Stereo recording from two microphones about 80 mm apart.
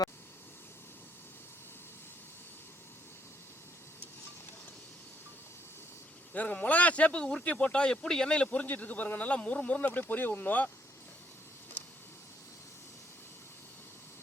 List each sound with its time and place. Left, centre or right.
6.3 s speech: centre